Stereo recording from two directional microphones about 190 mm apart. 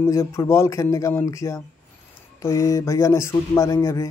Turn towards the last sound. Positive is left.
turn(degrees=15)  # may be behind; listen again after turning